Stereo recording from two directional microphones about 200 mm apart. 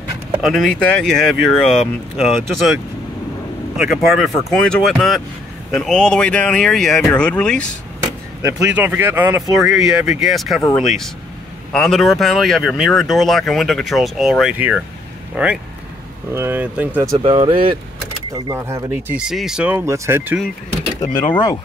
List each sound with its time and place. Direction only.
0.4 s speech: centre (ahead or behind)
3.7 s speech: 5° right (ahead or behind)
8.5 s speech: 10° right (ahead or behind)
11.7 s speech: centre (ahead or behind)
17.2 s speech: 30° right (ahead or behind)
18.3 s speech: 15° right (ahead or behind)
21.0 s speech: 20° left (ahead or behind)